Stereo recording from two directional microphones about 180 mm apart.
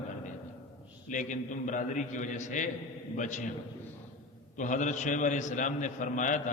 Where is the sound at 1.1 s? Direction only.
45° left (ahead or behind).